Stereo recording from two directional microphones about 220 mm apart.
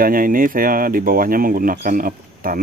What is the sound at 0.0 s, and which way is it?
Speech, 40° right (ahead or behind).